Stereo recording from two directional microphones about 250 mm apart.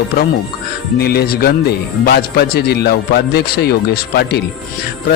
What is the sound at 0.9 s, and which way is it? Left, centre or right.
Speech, left.